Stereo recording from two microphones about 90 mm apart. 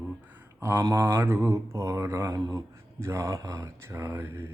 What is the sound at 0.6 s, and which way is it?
Speech, 25° right (ahead or behind).